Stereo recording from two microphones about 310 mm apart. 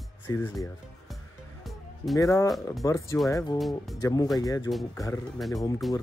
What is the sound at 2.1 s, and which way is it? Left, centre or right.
Speech, centre.